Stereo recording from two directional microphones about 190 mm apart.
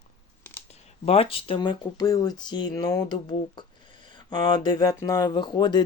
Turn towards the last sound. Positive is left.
turn(degrees=25)  # may be behind; listen again after turning